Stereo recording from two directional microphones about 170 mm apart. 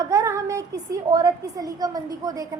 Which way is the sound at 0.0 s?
20° right (ahead or behind).